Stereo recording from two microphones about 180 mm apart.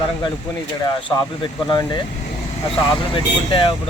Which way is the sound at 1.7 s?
20° left (ahead or behind).